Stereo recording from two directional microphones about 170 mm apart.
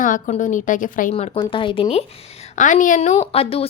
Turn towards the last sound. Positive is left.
turn(degrees=35)  # may be behind; listen again after turning